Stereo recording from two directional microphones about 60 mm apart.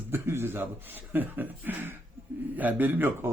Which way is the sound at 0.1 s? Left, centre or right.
Right.